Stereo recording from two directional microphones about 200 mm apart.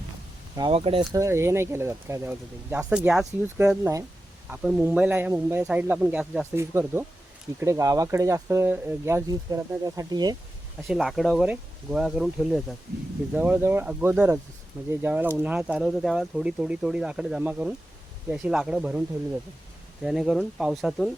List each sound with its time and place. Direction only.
0.5 s speech: 20° right (ahead or behind)
1.2 s speech: 15° right (ahead or behind)
10.8 s speech: centre (ahead or behind)